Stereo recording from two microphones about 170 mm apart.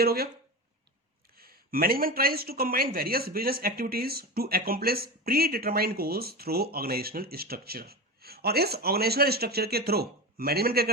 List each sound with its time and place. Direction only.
0.0 s speech: 65° right (ahead or behind)
1.4 s speech: 60° right (ahead or behind)